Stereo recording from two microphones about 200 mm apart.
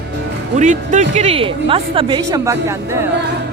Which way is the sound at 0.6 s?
40° right (ahead or behind).